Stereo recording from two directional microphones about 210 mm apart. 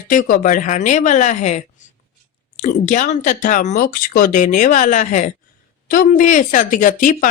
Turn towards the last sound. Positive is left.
turn(degrees=40)  # may be behind; listen again after turning